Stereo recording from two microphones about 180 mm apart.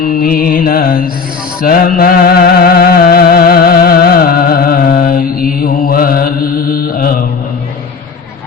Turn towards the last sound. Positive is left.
turn(degrees=50)  # may be behind; listen again after turning